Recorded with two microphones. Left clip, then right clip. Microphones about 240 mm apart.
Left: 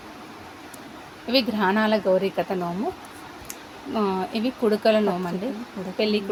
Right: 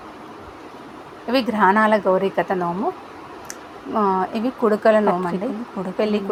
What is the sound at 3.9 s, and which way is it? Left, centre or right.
Speech, centre.